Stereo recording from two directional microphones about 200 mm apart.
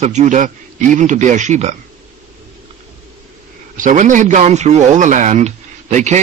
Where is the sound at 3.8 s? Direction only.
40° right (ahead or behind).